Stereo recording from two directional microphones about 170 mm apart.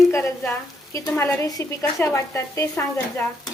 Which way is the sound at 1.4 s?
20° left (ahead or behind).